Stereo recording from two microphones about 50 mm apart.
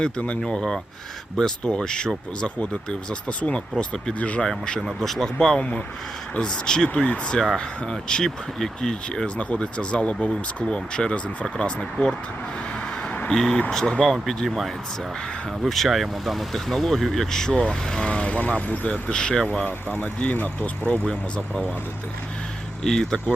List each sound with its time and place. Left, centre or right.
0.0 s speech: left
0.5 s speech: centre
3.1 s speech: left
9.4 s speech: left
13.0 s a sound: left
13.3 s speech: centre
20.0 s speech: left
21.1 s speech: centre
22.8 s speech: centre